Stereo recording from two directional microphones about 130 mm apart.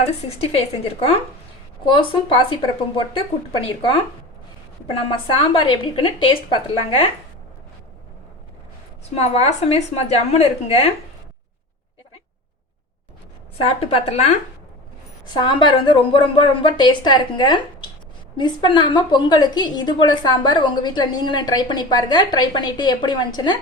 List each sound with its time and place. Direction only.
0.4 s a woman's voice: 50° left (ahead or behind)
4.9 s a woman's voice: 40° left (ahead or behind)
9.3 s a woman's voice: 55° left (ahead or behind)
13.7 s a woman's voice: 45° left (ahead or behind)
15.3 s a woman's voice: 35° left (ahead or behind)